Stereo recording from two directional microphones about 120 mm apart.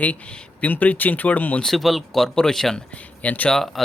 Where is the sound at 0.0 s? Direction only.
10° left (ahead or behind).